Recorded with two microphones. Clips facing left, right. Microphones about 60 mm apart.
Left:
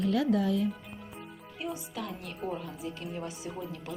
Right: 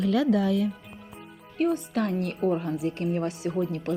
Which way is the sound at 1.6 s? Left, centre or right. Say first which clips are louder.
Right 12 dB; right.